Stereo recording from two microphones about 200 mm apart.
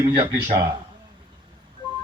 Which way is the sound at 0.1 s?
25° right (ahead or behind).